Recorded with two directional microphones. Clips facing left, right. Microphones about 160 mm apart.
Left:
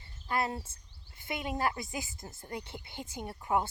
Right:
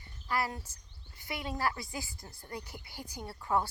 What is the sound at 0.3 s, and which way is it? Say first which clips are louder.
A woman's voice: left 2 dB; 25° left (ahead or behind).